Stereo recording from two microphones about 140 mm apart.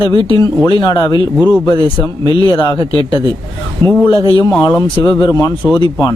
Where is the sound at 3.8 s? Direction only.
20° left (ahead or behind).